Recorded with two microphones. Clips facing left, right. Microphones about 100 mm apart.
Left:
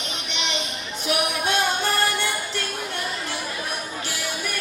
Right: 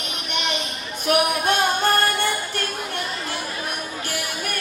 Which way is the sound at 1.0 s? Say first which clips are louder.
Right 4 dB; 50° right (ahead or behind).